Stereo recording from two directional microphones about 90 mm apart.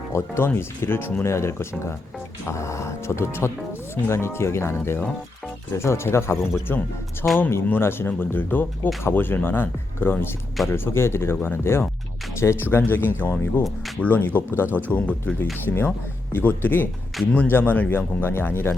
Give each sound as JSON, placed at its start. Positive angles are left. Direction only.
{"t": 0.1, "sound": "speech", "side_deg": 25}